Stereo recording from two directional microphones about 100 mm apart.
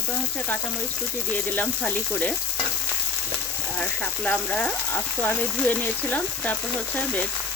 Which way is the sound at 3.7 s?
15° left (ahead or behind).